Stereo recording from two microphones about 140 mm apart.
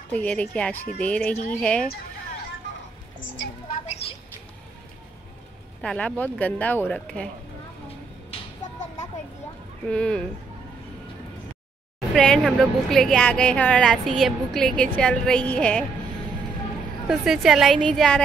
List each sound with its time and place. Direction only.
0.1 s speech: 10° left (ahead or behind)
3.7 s a sound: 55° left (ahead or behind)
5.8 s speech: 5° left (ahead or behind)
9.8 s speech: 10° left (ahead or behind)
12.1 s speech: centre (ahead or behind)
17.1 s speech: centre (ahead or behind)